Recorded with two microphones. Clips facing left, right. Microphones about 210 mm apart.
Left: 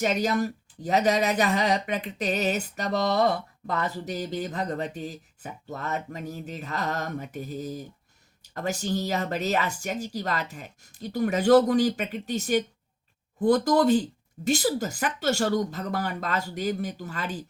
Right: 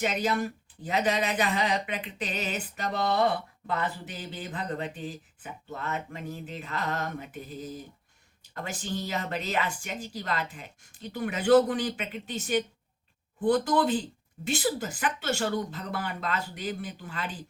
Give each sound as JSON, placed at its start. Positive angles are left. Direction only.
{"t": 0.0, "sound": "speech", "side_deg": 40}